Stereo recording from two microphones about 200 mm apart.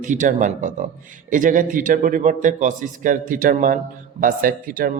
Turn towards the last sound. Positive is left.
turn(degrees=-45)  # may be behind; listen again after turning